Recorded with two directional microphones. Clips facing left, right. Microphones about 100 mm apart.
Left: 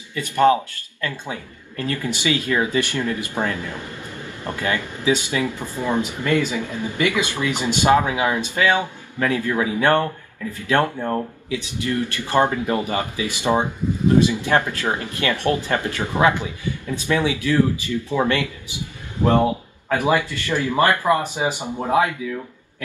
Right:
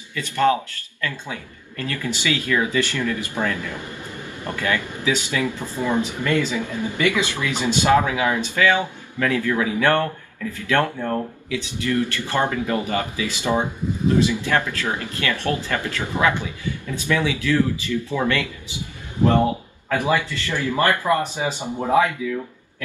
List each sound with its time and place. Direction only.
0.1 s speech: 20° left (ahead or behind)
6.6 s speech: 15° right (ahead or behind)
7.0 s speech: 15° left (ahead or behind)
19.9 s speech: 20° left (ahead or behind)